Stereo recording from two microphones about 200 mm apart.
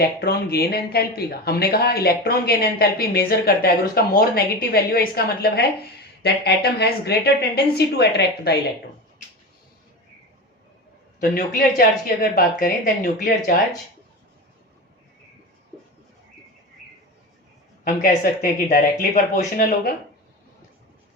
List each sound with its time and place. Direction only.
0.2 s speech: 50° left (ahead or behind)
11.2 s speech: 45° left (ahead or behind)
17.8 s speech: 45° left (ahead or behind)